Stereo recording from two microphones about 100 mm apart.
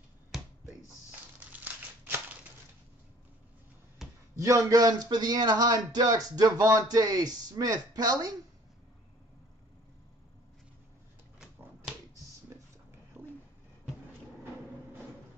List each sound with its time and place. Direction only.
1.5 s crumpling: 20° right (ahead or behind)
4.4 s speech: 30° right (ahead or behind)
13.2 s a sound: 25° right (ahead or behind)